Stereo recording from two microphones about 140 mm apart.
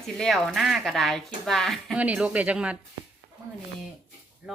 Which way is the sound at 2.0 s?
10° right (ahead or behind).